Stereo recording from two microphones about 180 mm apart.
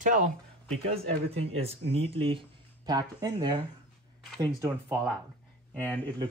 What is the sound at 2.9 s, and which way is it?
Speech, 20° right (ahead or behind).